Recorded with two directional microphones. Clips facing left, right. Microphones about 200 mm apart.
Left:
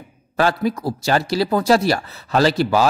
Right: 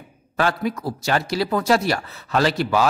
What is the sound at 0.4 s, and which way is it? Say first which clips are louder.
A man's voice: left 3 dB; 35° left (ahead or behind).